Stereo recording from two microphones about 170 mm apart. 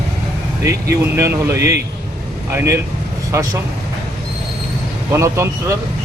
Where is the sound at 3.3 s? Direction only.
15° right (ahead or behind).